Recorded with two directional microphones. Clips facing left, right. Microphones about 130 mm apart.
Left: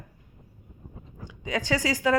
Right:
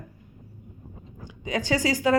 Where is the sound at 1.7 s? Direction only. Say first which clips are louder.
Right 3 dB; 30° right (ahead or behind).